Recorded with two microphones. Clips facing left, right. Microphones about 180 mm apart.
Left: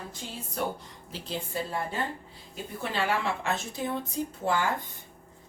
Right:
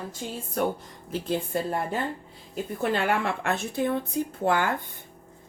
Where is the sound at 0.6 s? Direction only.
50° right (ahead or behind).